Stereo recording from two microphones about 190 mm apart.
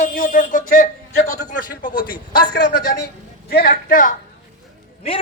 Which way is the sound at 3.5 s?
50° left (ahead or behind).